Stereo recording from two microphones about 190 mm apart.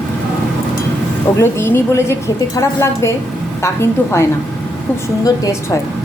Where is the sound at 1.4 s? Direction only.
15° left (ahead or behind).